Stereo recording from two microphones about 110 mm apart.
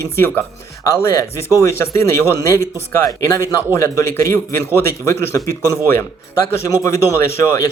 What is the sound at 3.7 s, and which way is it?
A man's voice, 25° left (ahead or behind).